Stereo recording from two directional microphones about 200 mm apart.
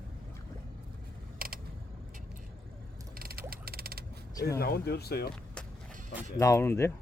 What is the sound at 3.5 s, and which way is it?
Frog, 50° right (ahead or behind).